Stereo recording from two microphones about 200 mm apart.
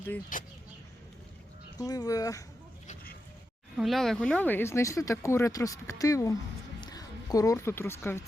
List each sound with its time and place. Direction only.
0.3 s speech: 45° left (ahead or behind)
1.8 s speech: 20° left (ahead or behind)
2.8 s a sound: 40° left (ahead or behind)
3.8 s a woman's voice: centre (ahead or behind)